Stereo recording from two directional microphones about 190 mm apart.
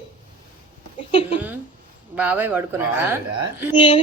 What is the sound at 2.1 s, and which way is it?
A woman's voice, 10° right (ahead or behind).